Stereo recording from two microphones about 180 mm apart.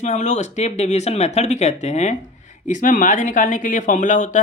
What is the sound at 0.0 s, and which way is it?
Speech, 40° left (ahead or behind).